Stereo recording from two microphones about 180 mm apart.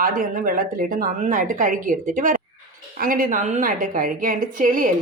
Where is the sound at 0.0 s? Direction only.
50° right (ahead or behind).